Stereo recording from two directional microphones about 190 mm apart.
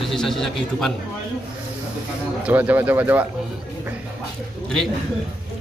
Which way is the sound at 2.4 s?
10° right (ahead or behind).